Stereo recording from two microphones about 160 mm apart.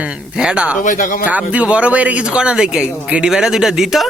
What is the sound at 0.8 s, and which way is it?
Speech, 55° left (ahead or behind).